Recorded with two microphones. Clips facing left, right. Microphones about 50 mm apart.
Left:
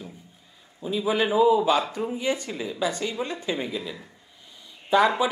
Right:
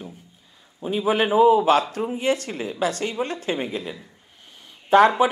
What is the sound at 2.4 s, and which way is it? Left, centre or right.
A woman's voice, right.